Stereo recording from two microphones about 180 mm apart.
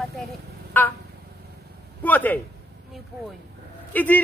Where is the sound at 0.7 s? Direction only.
10° left (ahead or behind).